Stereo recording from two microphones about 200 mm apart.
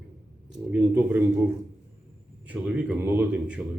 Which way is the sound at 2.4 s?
10° right (ahead or behind).